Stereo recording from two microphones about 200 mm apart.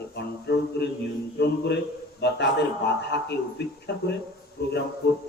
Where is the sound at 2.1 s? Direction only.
55° left (ahead or behind).